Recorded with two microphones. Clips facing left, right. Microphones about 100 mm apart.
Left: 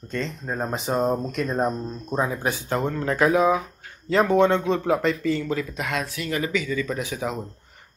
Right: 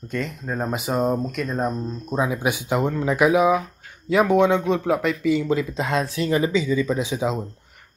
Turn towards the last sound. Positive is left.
turn(degrees=-20)  # may be behind; listen again after turning